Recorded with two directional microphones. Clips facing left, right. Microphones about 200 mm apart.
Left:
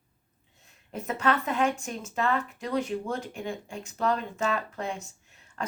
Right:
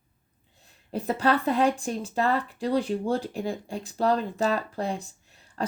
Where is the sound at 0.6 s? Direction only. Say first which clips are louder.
Right 6 dB; 35° right (ahead or behind).